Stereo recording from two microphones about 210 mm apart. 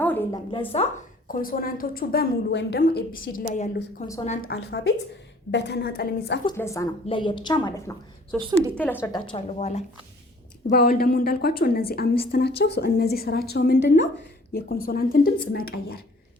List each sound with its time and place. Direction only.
0.0 s a sound: 10° left (ahead or behind)
1.3 s a woman's voice: 40° left (ahead or behind)
4.5 s a woman's voice: 55° left (ahead or behind)
6.6 s a woman's voice: 15° left (ahead or behind)
8.3 s a woman's voice: 5° left (ahead or behind)
9.1 s a woman's voice: 30° left (ahead or behind)
10.7 s a woman's voice: 45° left (ahead or behind)